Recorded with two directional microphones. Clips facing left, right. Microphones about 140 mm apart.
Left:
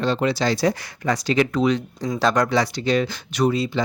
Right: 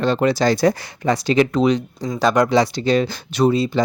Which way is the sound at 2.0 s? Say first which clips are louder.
Right 2 dB; centre (ahead or behind).